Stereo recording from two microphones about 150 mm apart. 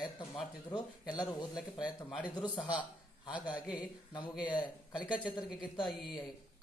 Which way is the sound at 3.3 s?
5° right (ahead or behind).